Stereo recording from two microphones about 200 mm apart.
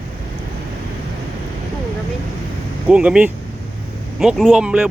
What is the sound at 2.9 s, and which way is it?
Speech, 5° right (ahead or behind).